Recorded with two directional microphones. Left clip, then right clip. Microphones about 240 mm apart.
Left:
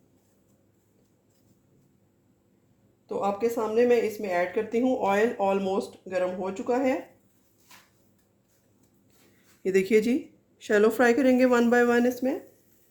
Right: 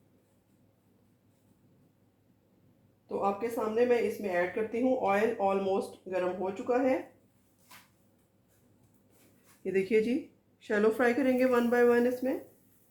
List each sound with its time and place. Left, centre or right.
3.1 s speech: left
9.6 s speech: left